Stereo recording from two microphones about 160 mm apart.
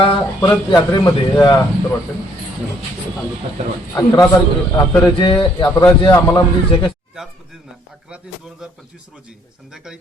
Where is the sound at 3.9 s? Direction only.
20° left (ahead or behind).